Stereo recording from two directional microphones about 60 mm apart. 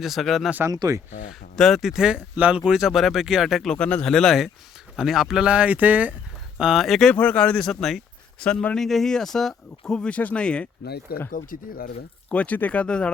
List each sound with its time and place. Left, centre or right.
0.0 s speech: centre
0.7 s speech: right
1.5 s speech: centre
1.9 s speech: centre
2.3 s speech: right
2.6 s speech: centre
3.7 s speech: left
4.0 s speech: centre
4.9 s speech: centre; by 6.1 s right
6.6 s speech: centre
6.8 s speech: centre
7.2 s speech: left
7.7 s speech: centre
12.3 s speech: left